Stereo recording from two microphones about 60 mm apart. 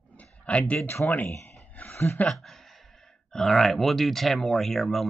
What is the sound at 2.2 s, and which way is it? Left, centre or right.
Speech, centre.